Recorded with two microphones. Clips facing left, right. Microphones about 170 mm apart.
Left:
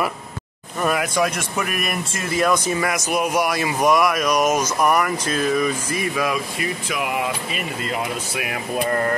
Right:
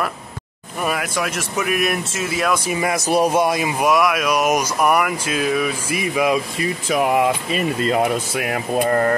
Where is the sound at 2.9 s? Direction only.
35° right (ahead or behind).